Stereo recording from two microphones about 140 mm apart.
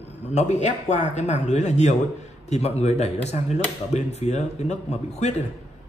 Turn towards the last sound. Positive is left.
turn(degrees=50)  # may be behind; listen again after turning